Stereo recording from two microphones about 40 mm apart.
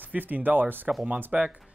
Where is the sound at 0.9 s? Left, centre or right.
Right.